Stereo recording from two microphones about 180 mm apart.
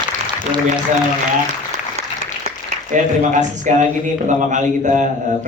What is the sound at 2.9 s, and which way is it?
Speech, 45° right (ahead or behind).